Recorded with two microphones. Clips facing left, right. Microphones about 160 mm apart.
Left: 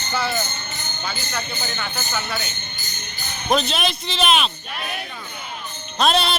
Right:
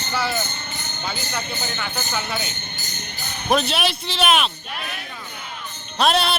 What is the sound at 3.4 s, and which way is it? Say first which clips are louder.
Speech: even; 10° right (ahead or behind).